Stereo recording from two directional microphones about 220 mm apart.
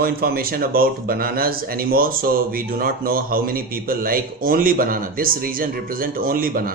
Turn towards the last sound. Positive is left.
turn(degrees=-40)  # may be behind; listen again after turning